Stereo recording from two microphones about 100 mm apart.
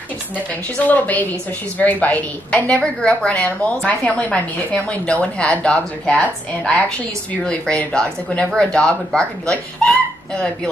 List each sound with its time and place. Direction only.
0.8 s a woman's voice: 15° left (ahead or behind)